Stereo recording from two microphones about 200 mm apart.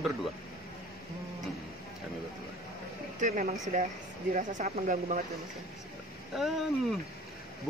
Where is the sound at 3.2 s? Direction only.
40° right (ahead or behind).